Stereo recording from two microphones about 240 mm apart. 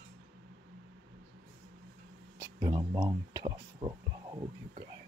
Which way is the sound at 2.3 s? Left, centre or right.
Centre.